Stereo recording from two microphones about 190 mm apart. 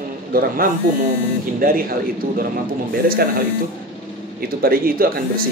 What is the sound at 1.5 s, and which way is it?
Speech, 50° right (ahead or behind).